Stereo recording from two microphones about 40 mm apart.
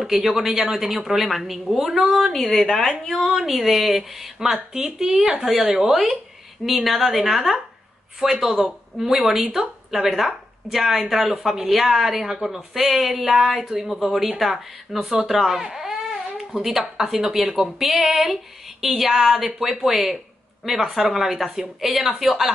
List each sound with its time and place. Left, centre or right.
0.0 s a woman's voice: centre
15.0 s baby cry: centre
16.7 s a woman's voice: centre